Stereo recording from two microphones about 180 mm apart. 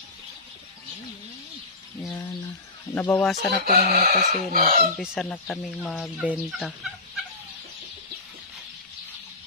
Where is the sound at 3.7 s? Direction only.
55° right (ahead or behind).